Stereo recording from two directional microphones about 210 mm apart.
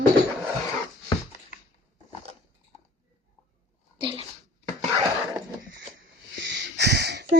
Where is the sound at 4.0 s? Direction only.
25° right (ahead or behind).